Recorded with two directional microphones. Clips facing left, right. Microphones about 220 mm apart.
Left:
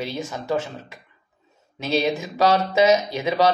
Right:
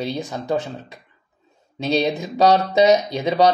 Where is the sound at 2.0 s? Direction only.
20° right (ahead or behind).